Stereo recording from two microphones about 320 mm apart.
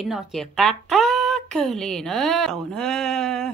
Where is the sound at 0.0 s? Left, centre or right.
Centre.